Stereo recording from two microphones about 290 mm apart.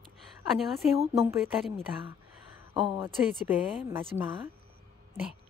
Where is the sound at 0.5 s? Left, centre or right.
Centre.